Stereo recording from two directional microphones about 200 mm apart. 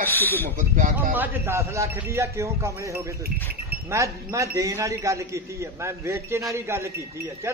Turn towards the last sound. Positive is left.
turn(degrees=-15)  # may be behind; listen again after turning